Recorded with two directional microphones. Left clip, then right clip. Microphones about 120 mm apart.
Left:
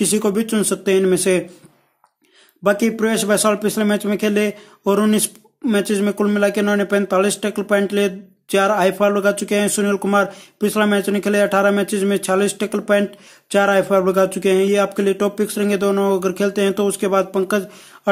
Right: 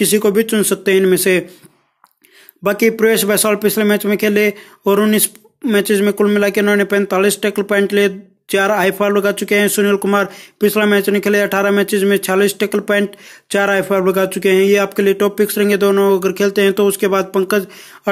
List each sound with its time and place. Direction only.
0.0 s speech: 10° right (ahead or behind)
2.6 s speech: 15° right (ahead or behind)